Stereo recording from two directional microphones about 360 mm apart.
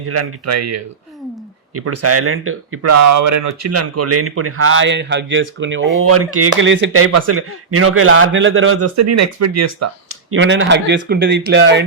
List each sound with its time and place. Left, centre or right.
0.1 s speech: right